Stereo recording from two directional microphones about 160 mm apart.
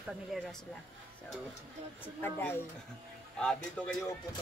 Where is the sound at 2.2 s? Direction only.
15° left (ahead or behind).